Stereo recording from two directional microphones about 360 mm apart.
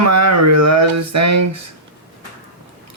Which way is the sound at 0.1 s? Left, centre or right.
Right.